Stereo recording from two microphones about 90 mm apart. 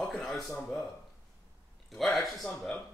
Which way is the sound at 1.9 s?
Centre (ahead or behind).